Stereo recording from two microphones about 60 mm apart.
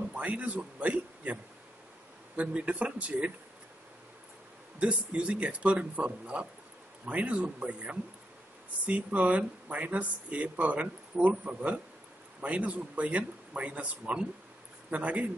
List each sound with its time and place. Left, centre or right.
0.1 s a sound: right
2.3 s speech: right
4.7 s speech: right